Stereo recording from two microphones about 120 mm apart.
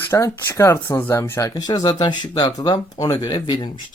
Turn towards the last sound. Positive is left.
turn(degrees=40)  # may be behind; listen again after turning